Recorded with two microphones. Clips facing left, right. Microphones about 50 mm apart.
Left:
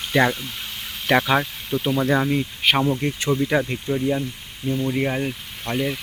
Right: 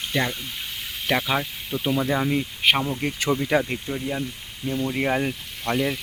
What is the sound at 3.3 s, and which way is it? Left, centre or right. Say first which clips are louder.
Speech: left 3 dB; centre.